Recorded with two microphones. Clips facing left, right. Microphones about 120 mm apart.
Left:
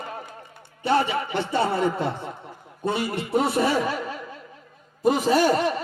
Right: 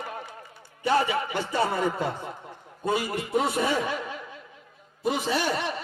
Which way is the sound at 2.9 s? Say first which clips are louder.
Left 2 dB; 30° left (ahead or behind).